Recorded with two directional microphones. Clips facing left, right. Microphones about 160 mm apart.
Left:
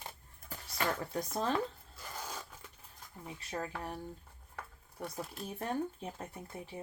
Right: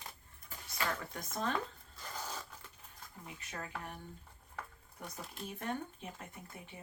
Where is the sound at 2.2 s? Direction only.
10° left (ahead or behind).